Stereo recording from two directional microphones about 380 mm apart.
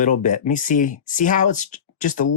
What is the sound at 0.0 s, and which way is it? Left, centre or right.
Speech, centre.